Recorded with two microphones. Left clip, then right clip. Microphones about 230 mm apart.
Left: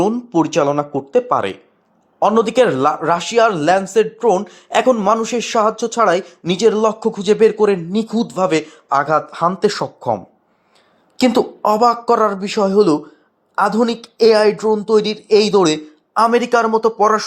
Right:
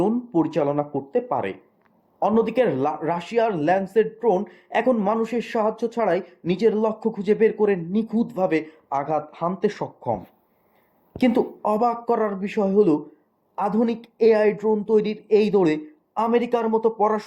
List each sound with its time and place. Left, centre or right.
0.0 s a man's voice: centre
9.8 s speech: left
11.2 s a man's voice: centre